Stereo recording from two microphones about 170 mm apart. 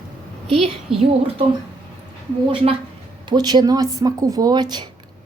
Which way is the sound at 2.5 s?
35° right (ahead or behind).